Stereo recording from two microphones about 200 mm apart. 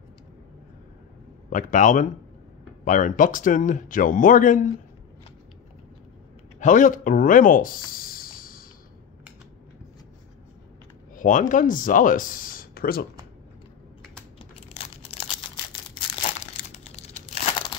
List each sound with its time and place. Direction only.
1.5 s speech: 40° left (ahead or behind)
6.6 s speech: 40° left (ahead or behind)
11.1 s speech: 40° left (ahead or behind)
14.5 s crumpling: 30° left (ahead or behind)
16.3 s crumpling: 30° left (ahead or behind)